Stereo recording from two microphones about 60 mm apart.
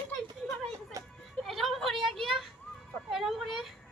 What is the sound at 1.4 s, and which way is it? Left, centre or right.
A woman's voice, centre.